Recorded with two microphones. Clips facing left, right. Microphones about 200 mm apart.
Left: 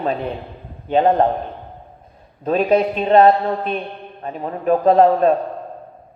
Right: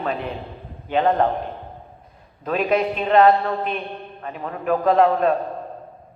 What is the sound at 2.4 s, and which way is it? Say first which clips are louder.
Speech: left 4 dB; 30° left (ahead or behind).